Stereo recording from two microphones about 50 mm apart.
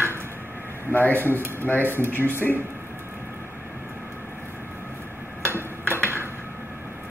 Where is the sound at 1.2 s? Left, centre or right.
Right.